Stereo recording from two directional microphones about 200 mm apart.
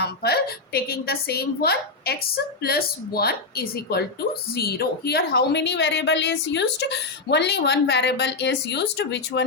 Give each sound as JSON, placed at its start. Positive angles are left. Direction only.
{"t": 0.0, "sound": "a woman's voice", "side_deg": 55}